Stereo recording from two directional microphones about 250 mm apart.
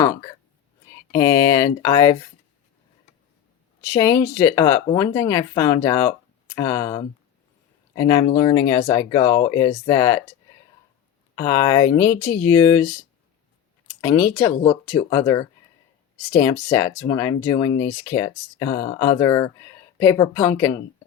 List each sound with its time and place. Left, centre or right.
0.0 s speech: centre
3.8 s speech: centre
11.3 s speech: centre
14.0 s speech: centre